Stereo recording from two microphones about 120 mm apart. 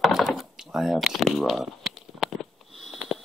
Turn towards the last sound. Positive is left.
turn(degrees=0)  # may be behind; listen again after turning